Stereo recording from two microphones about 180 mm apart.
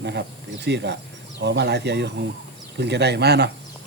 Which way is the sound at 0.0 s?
70° right (ahead or behind).